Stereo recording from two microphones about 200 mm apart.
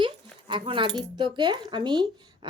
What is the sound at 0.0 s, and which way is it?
Dog, 25° right (ahead or behind).